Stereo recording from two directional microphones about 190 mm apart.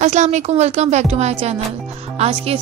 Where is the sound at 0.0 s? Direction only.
40° right (ahead or behind).